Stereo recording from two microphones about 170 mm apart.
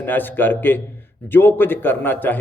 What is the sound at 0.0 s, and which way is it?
A man's voice, 10° left (ahead or behind).